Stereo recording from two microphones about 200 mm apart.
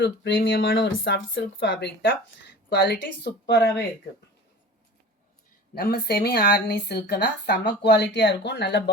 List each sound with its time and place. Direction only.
0.0 s speech: 70° left (ahead or behind)
5.7 s speech: 50° left (ahead or behind)